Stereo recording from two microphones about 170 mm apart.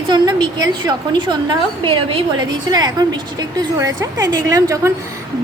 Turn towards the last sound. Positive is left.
turn(degrees=-20)  # may be behind; listen again after turning